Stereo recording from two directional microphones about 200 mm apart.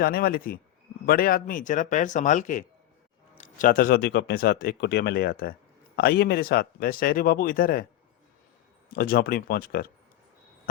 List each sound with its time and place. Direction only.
0.0 s speech: 50° left (ahead or behind)
8.9 s speech: 45° left (ahead or behind)